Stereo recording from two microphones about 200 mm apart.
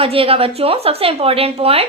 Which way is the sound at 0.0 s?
30° right (ahead or behind).